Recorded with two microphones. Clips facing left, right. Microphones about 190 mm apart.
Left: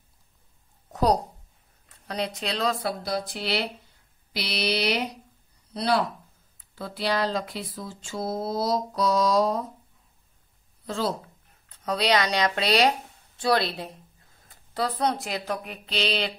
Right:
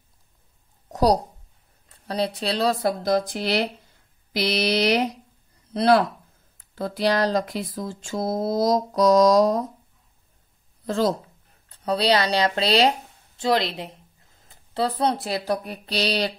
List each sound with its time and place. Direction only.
0.9 s speech: 35° right (ahead or behind)
10.9 s speech: 45° right (ahead or behind)
11.8 s a woman's voice: 30° right (ahead or behind)